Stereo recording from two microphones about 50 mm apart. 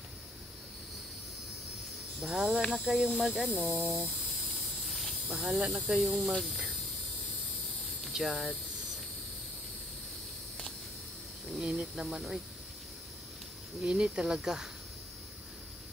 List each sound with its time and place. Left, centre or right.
2.1 s speech: centre
4.4 s hiss: centre
5.9 s speech: centre
8.1 s speech: centre
11.6 s speech: centre
13.7 s speech: centre